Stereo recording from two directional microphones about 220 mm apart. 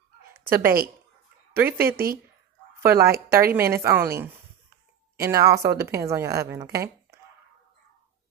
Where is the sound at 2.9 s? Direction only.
45° right (ahead or behind).